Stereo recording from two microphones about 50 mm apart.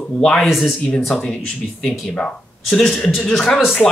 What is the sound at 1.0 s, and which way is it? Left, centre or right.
Speech, centre.